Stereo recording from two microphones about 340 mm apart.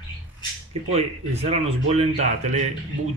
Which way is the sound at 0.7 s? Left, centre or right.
Centre.